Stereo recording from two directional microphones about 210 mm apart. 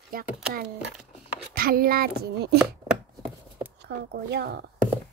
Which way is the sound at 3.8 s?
50° right (ahead or behind).